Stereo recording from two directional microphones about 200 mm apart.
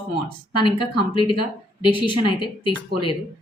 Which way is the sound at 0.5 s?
25° left (ahead or behind).